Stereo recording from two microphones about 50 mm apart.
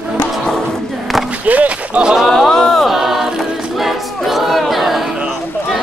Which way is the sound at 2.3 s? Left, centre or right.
Centre.